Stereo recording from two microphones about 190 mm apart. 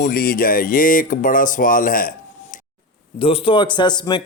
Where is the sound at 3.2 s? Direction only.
30° left (ahead or behind).